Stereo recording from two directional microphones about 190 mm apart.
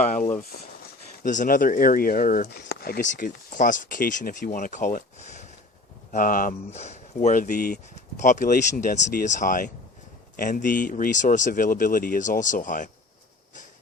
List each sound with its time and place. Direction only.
0.1 s speech: 40° left (ahead or behind)